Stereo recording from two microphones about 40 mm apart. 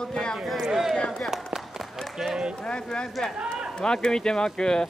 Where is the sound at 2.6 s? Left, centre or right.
Centre.